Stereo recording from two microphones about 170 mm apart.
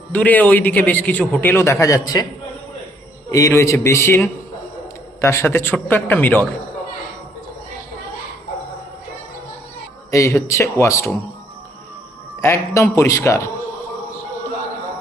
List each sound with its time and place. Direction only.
0.1 s a man's voice: 10° left (ahead or behind)
3.2 s a man's voice: 20° left (ahead or behind)
10.1 s a man's voice: 15° left (ahead or behind)
12.4 s a man's voice: 15° left (ahead or behind)